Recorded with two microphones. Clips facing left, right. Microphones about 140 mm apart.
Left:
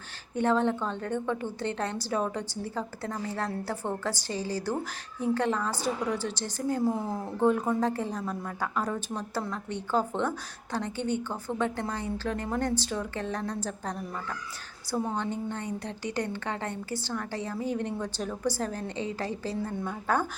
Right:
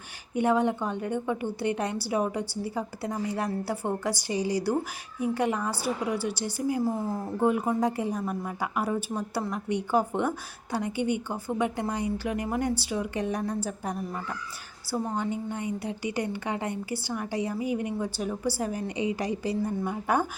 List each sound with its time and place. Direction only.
0.3 s a woman's voice: 10° right (ahead or behind)